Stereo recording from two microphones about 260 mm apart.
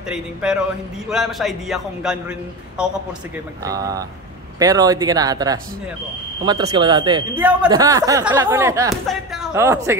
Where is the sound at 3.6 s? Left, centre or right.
Centre.